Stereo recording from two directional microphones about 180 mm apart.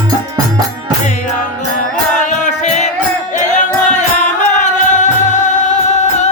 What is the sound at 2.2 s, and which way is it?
Music, 40° left (ahead or behind).